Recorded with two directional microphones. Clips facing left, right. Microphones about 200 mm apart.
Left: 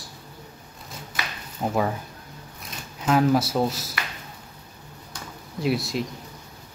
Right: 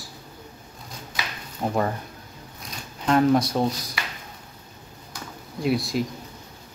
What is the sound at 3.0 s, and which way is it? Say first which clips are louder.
Speech: right 1 dB; 5° left (ahead or behind).